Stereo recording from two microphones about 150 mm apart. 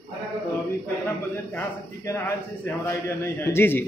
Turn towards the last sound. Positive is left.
turn(degrees=15)  # may be behind; listen again after turning